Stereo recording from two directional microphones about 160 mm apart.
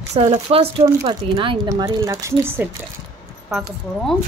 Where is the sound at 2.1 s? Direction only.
15° right (ahead or behind).